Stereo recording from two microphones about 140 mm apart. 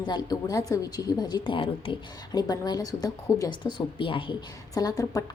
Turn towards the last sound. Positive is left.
turn(degrees=25)  # may be behind; listen again after turning